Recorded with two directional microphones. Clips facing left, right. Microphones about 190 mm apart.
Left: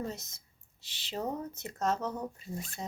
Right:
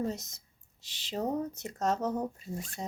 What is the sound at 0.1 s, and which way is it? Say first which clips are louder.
Speech: right 4 dB; 40° right (ahead or behind).